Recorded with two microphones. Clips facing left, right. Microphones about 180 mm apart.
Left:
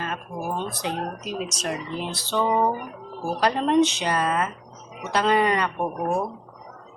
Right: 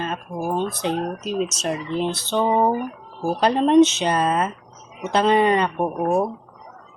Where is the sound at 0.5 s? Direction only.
25° right (ahead or behind).